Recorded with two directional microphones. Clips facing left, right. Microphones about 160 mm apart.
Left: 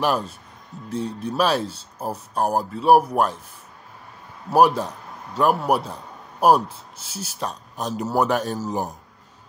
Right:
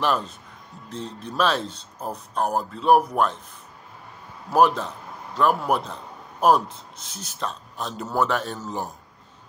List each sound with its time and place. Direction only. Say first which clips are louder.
0.0 s speech: left 2 dB; 10° left (ahead or behind)
4.5 s speech: left 2 dB; 10° left (ahead or behind)